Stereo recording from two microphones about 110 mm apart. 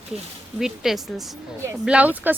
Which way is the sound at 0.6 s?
5° right (ahead or behind).